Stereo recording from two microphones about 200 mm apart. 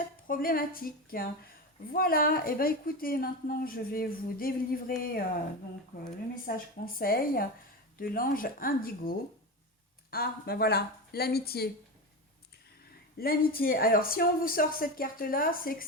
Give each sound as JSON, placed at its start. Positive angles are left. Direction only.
{"t": 0.3, "sound": "a woman's voice", "side_deg": 45}
{"t": 6.8, "sound": "a woman's voice", "side_deg": 45}
{"t": 13.1, "sound": "a woman's voice", "side_deg": 50}